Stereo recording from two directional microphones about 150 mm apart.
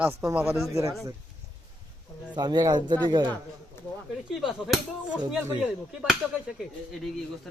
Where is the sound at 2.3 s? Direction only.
30° right (ahead or behind).